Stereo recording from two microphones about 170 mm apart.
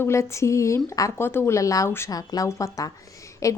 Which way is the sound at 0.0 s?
15° left (ahead or behind).